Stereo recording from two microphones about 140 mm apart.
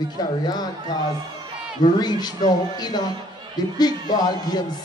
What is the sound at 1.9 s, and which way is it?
Speech, 30° left (ahead or behind).